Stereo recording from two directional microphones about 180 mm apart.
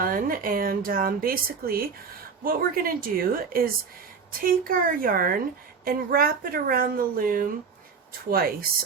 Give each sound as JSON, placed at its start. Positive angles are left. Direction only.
{"t": 0.0, "sound": "speech", "side_deg": -50}